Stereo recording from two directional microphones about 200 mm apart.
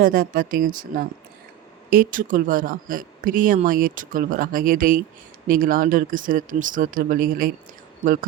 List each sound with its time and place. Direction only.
0.0 s speech: 45° right (ahead or behind)